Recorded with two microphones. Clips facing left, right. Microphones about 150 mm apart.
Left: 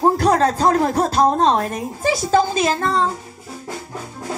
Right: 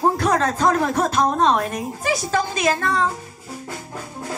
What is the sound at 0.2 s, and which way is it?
Speech, 35° left (ahead or behind).